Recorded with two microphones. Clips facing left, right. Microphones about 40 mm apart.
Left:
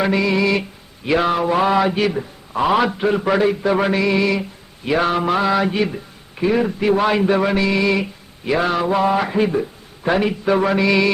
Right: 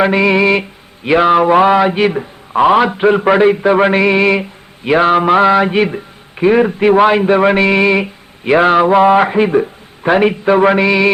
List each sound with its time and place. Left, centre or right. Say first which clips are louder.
0.0 s a man's voice: right 6 dB; right